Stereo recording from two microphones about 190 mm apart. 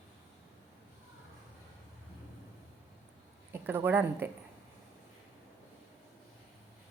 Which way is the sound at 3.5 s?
10° right (ahead or behind).